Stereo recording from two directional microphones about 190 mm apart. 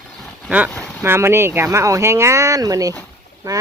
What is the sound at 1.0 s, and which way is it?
Speech, 10° right (ahead or behind).